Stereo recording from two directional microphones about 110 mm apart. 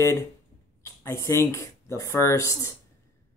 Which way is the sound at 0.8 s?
25° left (ahead or behind).